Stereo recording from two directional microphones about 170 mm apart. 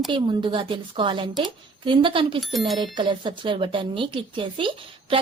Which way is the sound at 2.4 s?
Centre (ahead or behind).